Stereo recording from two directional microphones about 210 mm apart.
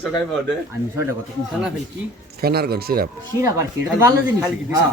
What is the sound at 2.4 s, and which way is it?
Speech, 45° right (ahead or behind).